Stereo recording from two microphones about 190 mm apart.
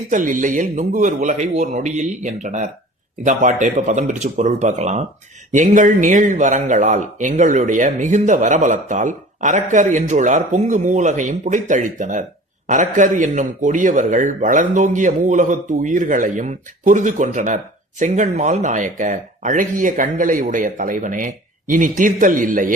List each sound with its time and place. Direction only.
0.1 s speech: 45° right (ahead or behind)